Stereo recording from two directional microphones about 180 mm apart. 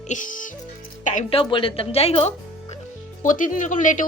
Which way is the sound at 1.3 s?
30° left (ahead or behind).